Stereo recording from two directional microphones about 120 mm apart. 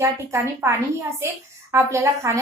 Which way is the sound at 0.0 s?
25° right (ahead or behind).